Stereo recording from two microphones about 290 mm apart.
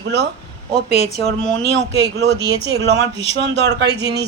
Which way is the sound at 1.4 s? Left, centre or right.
Centre.